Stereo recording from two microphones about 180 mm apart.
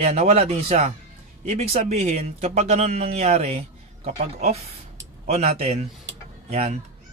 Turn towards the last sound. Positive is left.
turn(degrees=-35)  # may be behind; listen again after turning